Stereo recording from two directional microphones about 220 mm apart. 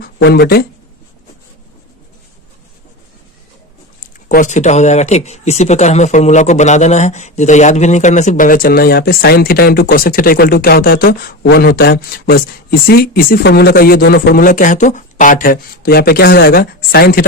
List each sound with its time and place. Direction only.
0.3 s speech: 45° left (ahead or behind)
4.3 s speech: 35° left (ahead or behind)